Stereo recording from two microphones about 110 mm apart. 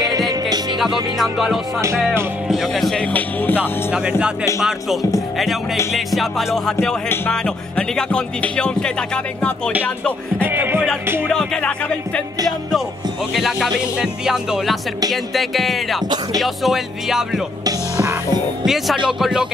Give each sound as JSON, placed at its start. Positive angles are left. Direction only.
{"t": 1.1, "sound": "music", "side_deg": 0}
{"t": 3.1, "sound": "speech", "side_deg": 15}
{"t": 3.9, "sound": "music", "side_deg": -10}
{"t": 5.9, "sound": "music", "side_deg": 0}
{"t": 7.1, "sound": "speech", "side_deg": 10}
{"t": 10.4, "sound": "music", "side_deg": -20}
{"t": 11.2, "sound": "speech", "side_deg": 5}
{"t": 13.3, "sound": "music", "side_deg": 0}
{"t": 19.0, "sound": "music", "side_deg": -5}